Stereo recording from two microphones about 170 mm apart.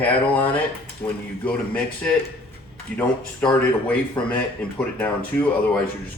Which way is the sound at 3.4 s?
10° left (ahead or behind).